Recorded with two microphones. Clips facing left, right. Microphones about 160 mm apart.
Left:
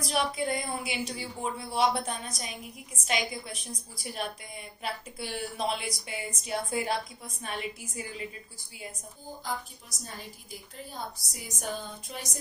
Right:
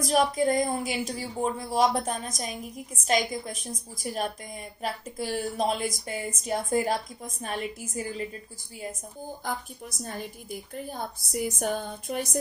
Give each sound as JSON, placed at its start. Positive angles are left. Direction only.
{"t": 0.0, "sound": "a woman's voice", "side_deg": -40}
{"t": 9.4, "sound": "a woman's voice", "side_deg": -55}